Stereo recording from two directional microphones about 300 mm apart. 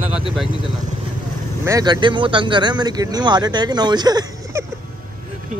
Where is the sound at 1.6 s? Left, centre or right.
Centre.